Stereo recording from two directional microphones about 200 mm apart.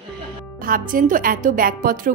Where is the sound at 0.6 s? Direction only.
45° right (ahead or behind).